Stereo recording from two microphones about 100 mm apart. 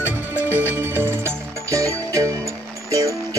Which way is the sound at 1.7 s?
30° right (ahead or behind).